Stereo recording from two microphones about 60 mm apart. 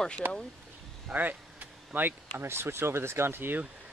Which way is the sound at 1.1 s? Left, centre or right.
Right.